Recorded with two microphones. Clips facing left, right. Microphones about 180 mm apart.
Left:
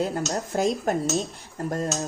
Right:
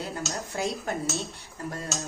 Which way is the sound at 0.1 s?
45° left (ahead or behind).